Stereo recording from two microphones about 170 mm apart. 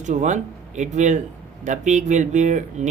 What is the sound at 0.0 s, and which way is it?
Speech, 45° right (ahead or behind).